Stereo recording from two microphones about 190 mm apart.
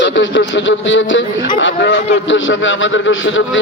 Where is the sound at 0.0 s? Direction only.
80° left.